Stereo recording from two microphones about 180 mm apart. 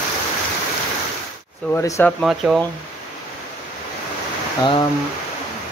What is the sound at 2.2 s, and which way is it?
Speech, 5° right (ahead or behind).